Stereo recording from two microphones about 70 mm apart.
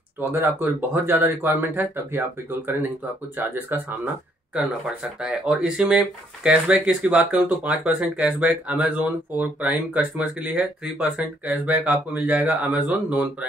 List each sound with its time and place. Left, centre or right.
0.2 s speech: right
5.2 s speech: centre